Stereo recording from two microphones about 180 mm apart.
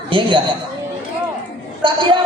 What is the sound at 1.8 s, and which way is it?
Speech, 25° right (ahead or behind).